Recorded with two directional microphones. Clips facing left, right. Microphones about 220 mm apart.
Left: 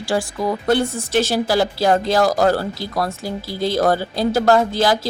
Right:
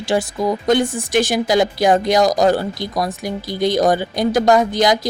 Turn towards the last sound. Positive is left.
turn(degrees=-15)  # may be behind; listen again after turning